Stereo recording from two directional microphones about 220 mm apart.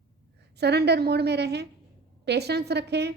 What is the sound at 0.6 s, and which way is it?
A woman's voice, 50° right (ahead or behind).